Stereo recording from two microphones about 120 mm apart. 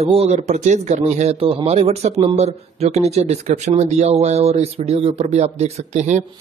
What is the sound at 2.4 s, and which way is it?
Speech, 65° right (ahead or behind).